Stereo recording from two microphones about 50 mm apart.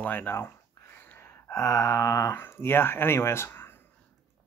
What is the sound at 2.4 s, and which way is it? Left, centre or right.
Speech, left.